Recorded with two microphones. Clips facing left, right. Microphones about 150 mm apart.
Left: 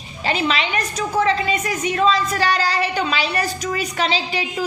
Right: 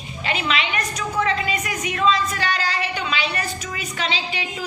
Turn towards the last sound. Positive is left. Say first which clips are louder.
# left 5 dB
turn(degrees=35)  # may be behind; listen again after turning